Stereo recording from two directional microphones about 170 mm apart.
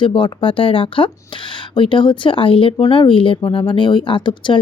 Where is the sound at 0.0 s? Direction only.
30° left (ahead or behind).